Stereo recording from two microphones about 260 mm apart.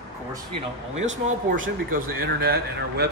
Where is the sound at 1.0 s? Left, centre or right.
Right.